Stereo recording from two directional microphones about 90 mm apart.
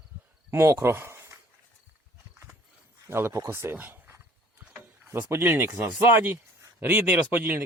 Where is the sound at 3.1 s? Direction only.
25° right (ahead or behind).